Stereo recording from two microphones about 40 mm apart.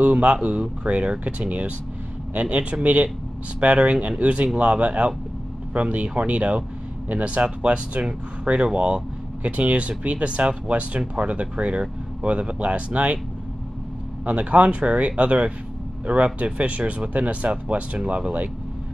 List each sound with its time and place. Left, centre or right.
0.0 s speech: right
2.5 s speech: right
14.2 s speech: right